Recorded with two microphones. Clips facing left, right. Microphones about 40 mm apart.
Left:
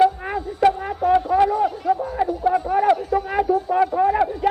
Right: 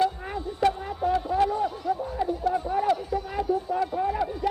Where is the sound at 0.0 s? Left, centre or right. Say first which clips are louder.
Left 8 dB; left.